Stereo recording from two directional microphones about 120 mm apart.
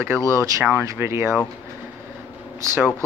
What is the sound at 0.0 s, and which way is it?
Speech, 20° right (ahead or behind).